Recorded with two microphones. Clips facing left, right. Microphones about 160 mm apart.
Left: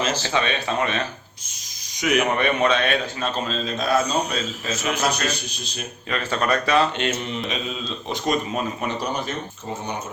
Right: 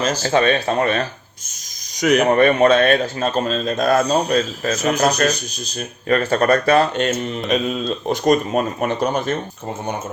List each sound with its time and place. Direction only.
0.0 s speech: 45° right (ahead or behind)
4.7 s speech: 40° right (ahead or behind)